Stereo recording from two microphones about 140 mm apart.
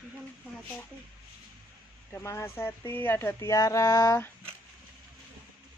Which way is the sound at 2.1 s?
15° left (ahead or behind).